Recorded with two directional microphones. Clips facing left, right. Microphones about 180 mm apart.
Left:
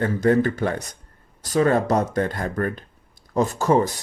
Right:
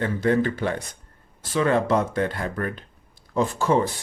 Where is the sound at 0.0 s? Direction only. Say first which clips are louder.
Left 3 dB; 45° left (ahead or behind).